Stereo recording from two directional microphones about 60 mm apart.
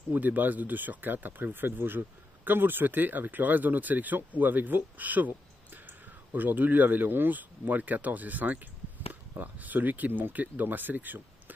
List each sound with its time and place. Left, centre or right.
0.1 s speech: right